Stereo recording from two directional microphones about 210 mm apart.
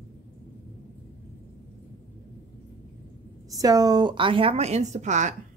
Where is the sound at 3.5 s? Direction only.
15° right (ahead or behind); by 5.3 s 35° right (ahead or behind).